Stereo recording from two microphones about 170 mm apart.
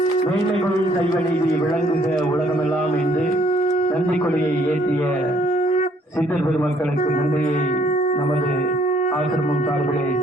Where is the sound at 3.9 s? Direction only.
10° left (ahead or behind).